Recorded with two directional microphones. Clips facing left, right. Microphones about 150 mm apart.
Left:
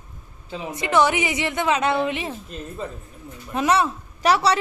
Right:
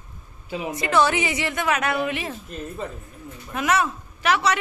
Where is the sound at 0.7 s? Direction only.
20° left (ahead or behind).